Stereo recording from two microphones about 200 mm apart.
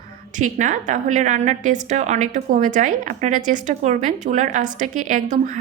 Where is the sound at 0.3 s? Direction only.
40° right (ahead or behind).